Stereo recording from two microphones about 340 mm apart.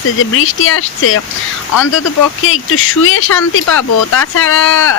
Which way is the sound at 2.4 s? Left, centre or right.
Left.